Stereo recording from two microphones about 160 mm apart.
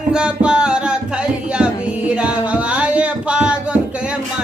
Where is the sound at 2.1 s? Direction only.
5° right (ahead or behind).